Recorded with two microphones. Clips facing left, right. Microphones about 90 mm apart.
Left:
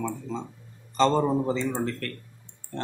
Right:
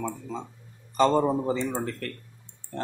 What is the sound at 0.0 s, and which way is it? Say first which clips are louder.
Speech: left 1 dB; 10° right (ahead or behind).